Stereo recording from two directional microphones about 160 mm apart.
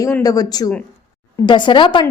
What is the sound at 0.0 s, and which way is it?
A woman's voice, 20° left (ahead or behind).